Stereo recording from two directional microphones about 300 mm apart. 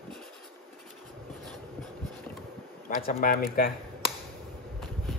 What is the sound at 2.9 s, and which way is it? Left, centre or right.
Speech, left.